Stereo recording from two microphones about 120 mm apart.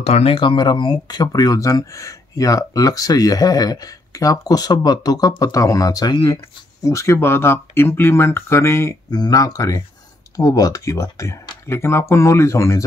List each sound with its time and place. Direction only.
0.0 s speech: 60° left (ahead or behind); by 12.8 s 25° left (ahead or behind)